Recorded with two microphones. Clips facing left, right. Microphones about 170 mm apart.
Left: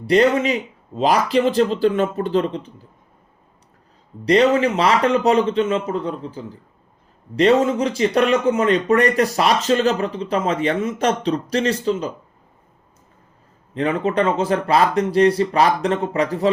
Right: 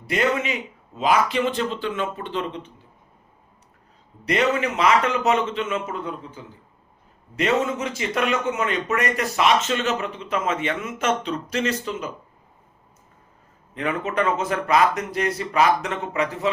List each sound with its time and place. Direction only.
0.1 s speech: 35° left (ahead or behind)
4.3 s speech: 30° left (ahead or behind)
13.7 s speech: 30° left (ahead or behind)